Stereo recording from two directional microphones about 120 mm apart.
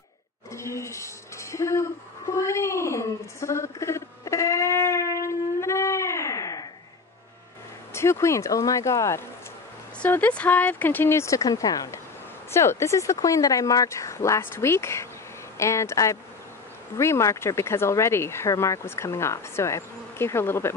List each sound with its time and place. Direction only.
0.5 s music: 25° left (ahead or behind)
2.4 s a sound: 25° left (ahead or behind)
7.9 s speech: 20° left (ahead or behind)
9.9 s speech: 15° left (ahead or behind)